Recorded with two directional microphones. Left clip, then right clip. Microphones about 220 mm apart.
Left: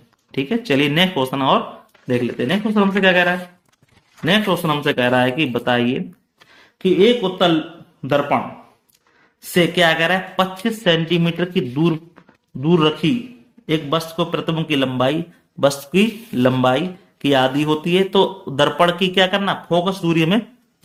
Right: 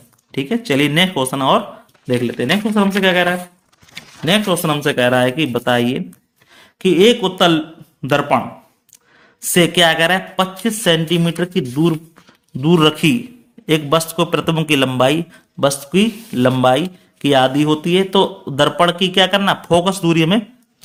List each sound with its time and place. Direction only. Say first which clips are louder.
0.3 s speech: right 1 dB; 10° right (ahead or behind)
6.6 s a man's voice: right 3 dB; 25° right (ahead or behind)
9.5 s a man's voice: right 3 dB; 25° right (ahead or behind)